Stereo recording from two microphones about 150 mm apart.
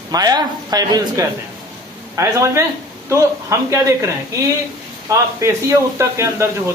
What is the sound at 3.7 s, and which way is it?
Speech, 20° right (ahead or behind).